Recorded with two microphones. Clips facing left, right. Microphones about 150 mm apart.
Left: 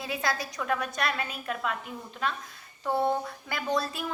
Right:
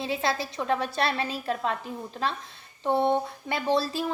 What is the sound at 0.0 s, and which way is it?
A woman's voice, 25° right (ahead or behind).